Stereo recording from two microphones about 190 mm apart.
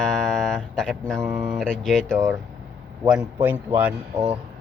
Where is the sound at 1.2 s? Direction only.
10° right (ahead or behind).